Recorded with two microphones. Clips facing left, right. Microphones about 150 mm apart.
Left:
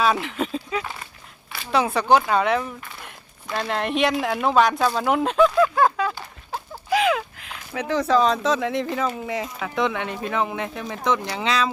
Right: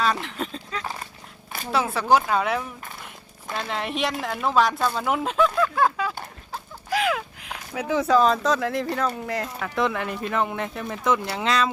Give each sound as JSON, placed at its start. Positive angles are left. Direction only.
{"t": 0.0, "sound": "speech", "side_deg": 5}
{"t": 1.7, "sound": "speech", "side_deg": -5}
{"t": 4.9, "sound": "a sound", "side_deg": 0}
{"t": 7.7, "sound": "speech", "side_deg": -5}